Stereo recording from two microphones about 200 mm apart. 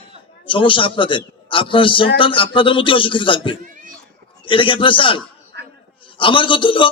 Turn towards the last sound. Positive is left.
turn(degrees=25)  # may be behind; listen again after turning